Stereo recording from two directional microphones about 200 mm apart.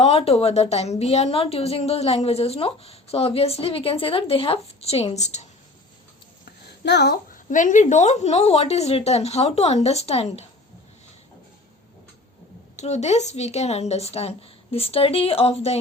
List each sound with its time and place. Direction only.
0.0 s a woman's voice: 30° left (ahead or behind)
6.8 s speech: 55° left (ahead or behind)
7.5 s speech: 40° left (ahead or behind)
12.7 s speech: 35° left (ahead or behind)